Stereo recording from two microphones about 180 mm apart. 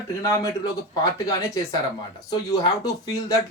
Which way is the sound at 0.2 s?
20° left (ahead or behind).